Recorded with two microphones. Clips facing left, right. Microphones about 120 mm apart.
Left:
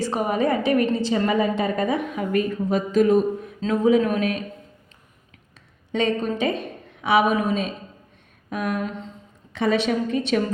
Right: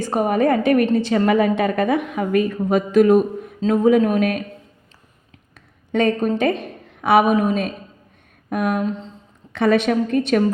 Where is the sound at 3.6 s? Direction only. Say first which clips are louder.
Right 4 dB; 45° right (ahead or behind).